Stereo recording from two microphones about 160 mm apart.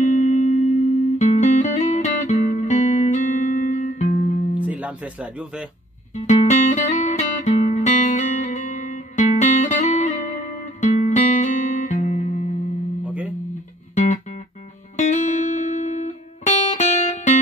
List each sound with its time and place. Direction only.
0.0 s music: 50° left (ahead or behind)
4.6 s speech: 10° right (ahead or behind)
6.1 s music: 50° left (ahead or behind)
13.0 s guitar: 10° right (ahead or behind)
15.0 s music: 45° left (ahead or behind)